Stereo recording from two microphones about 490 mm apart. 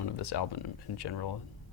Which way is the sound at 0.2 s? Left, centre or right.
Left.